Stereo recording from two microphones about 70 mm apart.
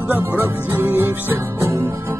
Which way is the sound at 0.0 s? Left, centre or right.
Right.